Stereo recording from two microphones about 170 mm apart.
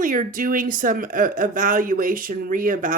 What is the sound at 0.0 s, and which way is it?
Speech, 50° right (ahead or behind).